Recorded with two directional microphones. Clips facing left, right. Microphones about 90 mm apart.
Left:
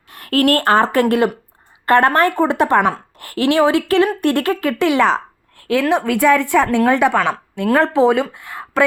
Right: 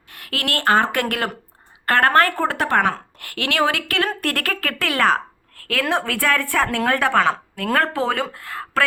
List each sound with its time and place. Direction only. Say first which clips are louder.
0.1 s a woman's voice: left 11 dB; 40° left (ahead or behind); by 8.8 s 20° left (ahead or behind)